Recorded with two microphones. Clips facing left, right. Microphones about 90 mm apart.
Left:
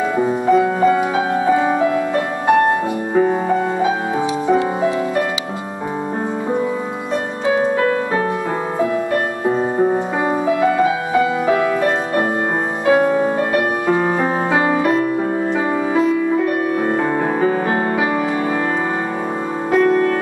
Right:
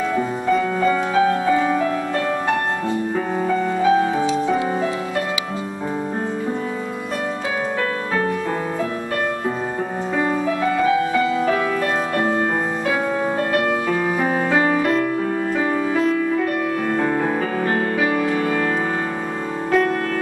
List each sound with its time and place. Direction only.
0.2 s music: 15° left (ahead or behind)
3.2 s music: 25° left (ahead or behind)
11.1 s music: 20° left (ahead or behind)
19.7 s music: 20° left (ahead or behind)